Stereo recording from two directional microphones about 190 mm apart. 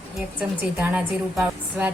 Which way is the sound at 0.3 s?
5° right (ahead or behind).